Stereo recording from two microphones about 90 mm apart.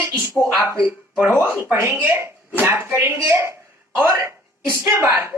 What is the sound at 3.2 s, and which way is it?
A woman's voice, 30° right (ahead or behind).